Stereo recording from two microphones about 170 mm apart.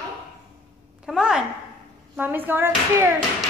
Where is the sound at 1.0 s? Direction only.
5° right (ahead or behind).